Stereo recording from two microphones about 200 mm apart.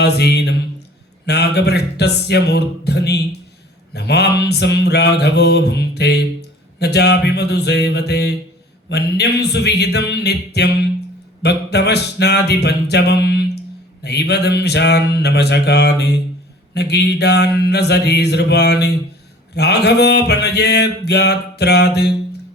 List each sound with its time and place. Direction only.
0.0 s mantra: 55° left (ahead or behind)